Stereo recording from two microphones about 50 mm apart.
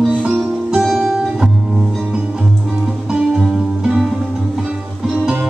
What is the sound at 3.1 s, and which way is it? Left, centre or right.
Music, centre.